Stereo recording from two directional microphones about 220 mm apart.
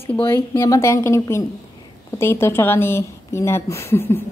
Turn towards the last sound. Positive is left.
turn(degrees=10)  # may be behind; listen again after turning